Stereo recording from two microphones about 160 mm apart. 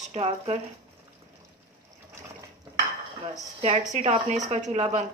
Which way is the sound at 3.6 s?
50° right (ahead or behind).